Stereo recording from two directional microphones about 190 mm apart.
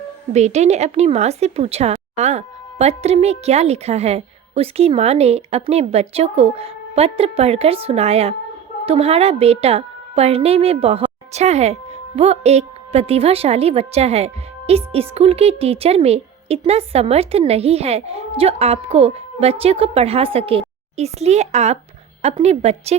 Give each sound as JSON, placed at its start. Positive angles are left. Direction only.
{"t": 0.3, "sound": "speech", "side_deg": -35}